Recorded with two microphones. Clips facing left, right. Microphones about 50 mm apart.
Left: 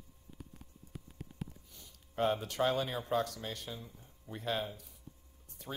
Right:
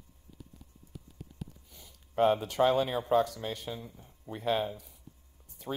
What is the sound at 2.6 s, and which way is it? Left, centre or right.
Speech, right.